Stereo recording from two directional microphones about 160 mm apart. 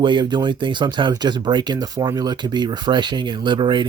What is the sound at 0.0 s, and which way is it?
Speech, 30° right (ahead or behind).